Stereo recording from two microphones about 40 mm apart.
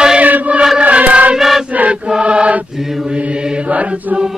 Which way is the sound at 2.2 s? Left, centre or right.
Right.